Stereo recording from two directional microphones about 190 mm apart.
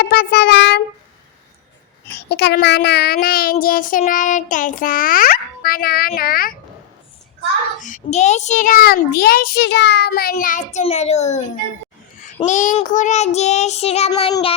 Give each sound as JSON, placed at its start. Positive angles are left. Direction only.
{"t": 0.1, "sound": "a sound", "side_deg": 60}
{"t": 2.0, "sound": "child singing", "side_deg": 55}
{"t": 7.8, "sound": "child singing", "side_deg": 40}
{"t": 10.8, "sound": "child singing", "side_deg": 35}
{"t": 12.5, "sound": "child singing", "side_deg": 40}